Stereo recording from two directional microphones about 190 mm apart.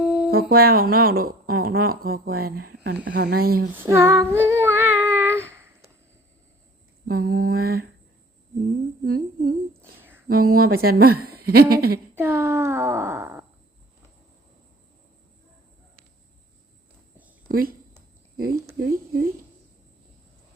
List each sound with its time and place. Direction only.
0.0 s humming: 5° right (ahead or behind)
0.3 s speech: 55° right (ahead or behind)
3.8 s child singing: 15° right (ahead or behind)
7.1 s speech: 50° right (ahead or behind)
9.0 s speech: 50° right (ahead or behind)
10.0 s a sound: 10° right (ahead or behind)
10.2 s speech: 50° right (ahead or behind)
12.1 s speech: 10° right (ahead or behind)
17.5 s speech: 50° right (ahead or behind)
18.8 s speech: 50° right (ahead or behind)